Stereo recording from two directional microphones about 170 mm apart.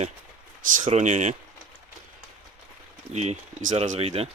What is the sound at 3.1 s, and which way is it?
Speech, 45° right (ahead or behind).